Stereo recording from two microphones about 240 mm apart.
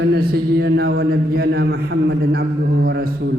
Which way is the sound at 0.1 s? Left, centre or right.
Right.